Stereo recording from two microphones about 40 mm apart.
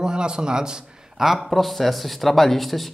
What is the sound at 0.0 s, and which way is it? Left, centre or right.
Speech, centre.